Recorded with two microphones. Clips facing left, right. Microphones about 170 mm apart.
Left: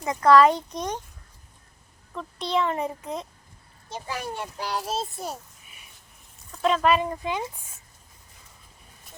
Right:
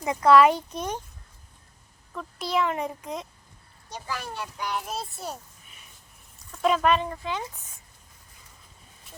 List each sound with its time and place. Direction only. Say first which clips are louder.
0.0 s a child's voice: left 1 dB; 10° right (ahead or behind)
2.1 s a child's voice: left 1 dB; centre (ahead or behind)
3.8 s a child's voice: left 2 dB; 25° left (ahead or behind)
4.5 s a child's voice: left 2 dB; 35° left (ahead or behind)
6.6 s speech: even; 5° right (ahead or behind)
6.9 s speech: left 2 dB; 15° left (ahead or behind)